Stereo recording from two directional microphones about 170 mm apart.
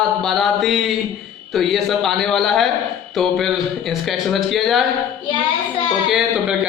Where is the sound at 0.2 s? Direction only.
Centre (ahead or behind).